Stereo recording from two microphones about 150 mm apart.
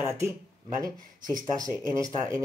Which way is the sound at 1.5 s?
20° right (ahead or behind).